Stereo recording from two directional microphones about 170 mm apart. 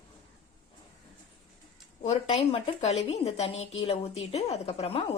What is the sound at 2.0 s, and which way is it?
A woman's voice, 35° left (ahead or behind).